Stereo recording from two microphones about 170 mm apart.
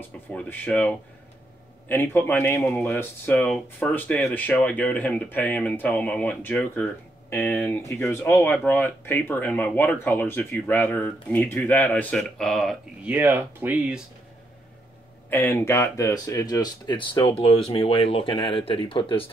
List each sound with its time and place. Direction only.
0.3 s speech: 5° left (ahead or behind)
15.2 s speech: 10° left (ahead or behind); by 19.3 s 30° left (ahead or behind)